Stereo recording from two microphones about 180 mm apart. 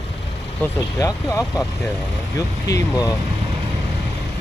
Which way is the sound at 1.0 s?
20° left (ahead or behind).